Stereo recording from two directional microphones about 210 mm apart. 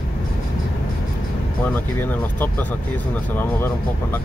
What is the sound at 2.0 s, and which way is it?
Speech, 10° left (ahead or behind).